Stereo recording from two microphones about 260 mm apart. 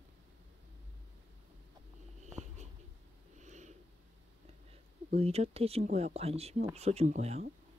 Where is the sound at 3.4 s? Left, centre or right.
Right.